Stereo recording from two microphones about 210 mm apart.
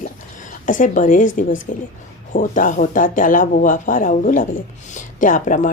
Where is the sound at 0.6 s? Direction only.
40° left (ahead or behind).